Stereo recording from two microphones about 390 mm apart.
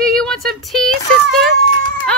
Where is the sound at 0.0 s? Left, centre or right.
Centre.